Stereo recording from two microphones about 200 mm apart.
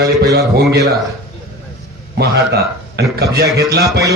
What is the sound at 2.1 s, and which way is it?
A man's voice, 55° right (ahead or behind).